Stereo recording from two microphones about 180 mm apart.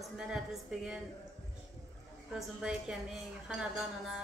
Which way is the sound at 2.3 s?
5° right (ahead or behind).